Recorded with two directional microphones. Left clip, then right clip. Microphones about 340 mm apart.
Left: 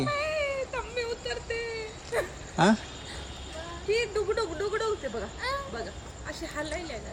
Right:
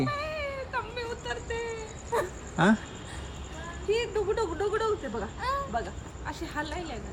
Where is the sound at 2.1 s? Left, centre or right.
Centre.